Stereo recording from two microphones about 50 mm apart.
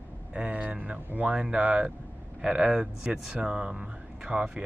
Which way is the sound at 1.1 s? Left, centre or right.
Right.